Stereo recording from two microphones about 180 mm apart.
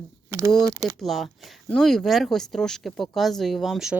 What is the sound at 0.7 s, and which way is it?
Speech, 20° right (ahead or behind).